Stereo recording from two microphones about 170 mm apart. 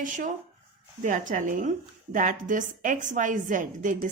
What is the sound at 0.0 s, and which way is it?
A woman's voice, 50° right (ahead or behind).